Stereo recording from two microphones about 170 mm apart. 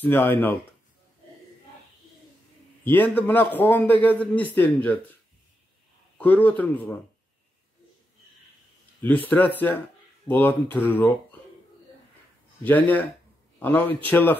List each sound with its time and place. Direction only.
0.0 s a man's voice: 10° left (ahead or behind)
2.8 s a man's voice: 10° left (ahead or behind)
6.1 s a man's voice: 10° left (ahead or behind)
9.0 s a man's voice: 10° left (ahead or behind)
12.6 s a man's voice: 10° left (ahead or behind)